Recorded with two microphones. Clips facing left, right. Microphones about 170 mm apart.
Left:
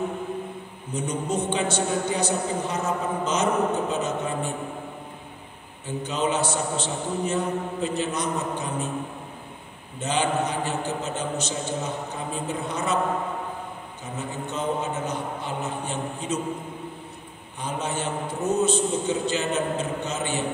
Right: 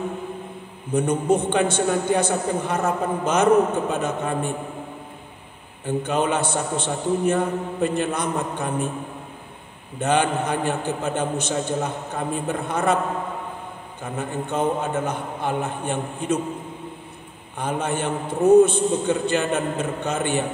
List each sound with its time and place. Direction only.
0.9 s a man's voice: 55° right (ahead or behind)
5.9 s a man's voice: 55° right (ahead or behind)
9.9 s a man's voice: 55° right (ahead or behind)
14.0 s a man's voice: 55° right (ahead or behind)
17.6 s a man's voice: 55° right (ahead or behind)